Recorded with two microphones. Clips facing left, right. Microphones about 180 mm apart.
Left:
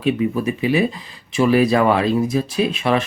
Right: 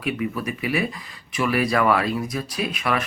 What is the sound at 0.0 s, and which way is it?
Speech, 25° left (ahead or behind).